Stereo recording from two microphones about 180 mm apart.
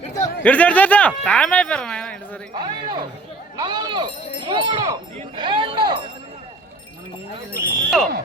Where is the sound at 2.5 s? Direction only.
25° right (ahead or behind).